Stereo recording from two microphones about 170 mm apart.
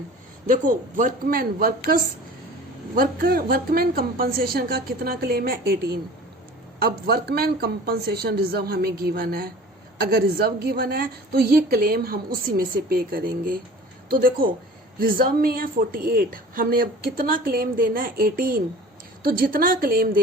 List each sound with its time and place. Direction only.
0.4 s a man's voice: 50° right (ahead or behind)
2.9 s a woman's voice: 60° right (ahead or behind)